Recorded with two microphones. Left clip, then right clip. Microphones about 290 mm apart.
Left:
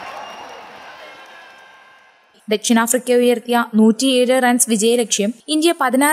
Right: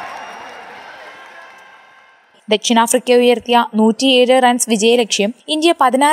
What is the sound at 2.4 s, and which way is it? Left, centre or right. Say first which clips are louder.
Speech: right 4 dB; left.